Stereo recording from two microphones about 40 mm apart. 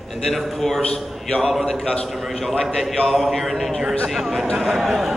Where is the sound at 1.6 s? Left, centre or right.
Left.